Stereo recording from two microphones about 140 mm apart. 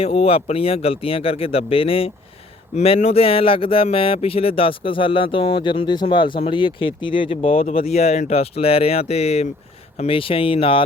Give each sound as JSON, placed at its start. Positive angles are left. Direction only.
{"t": 0.0, "sound": "speech", "side_deg": 45}